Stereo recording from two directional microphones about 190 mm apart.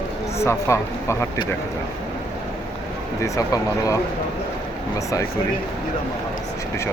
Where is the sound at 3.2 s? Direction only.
15° left (ahead or behind).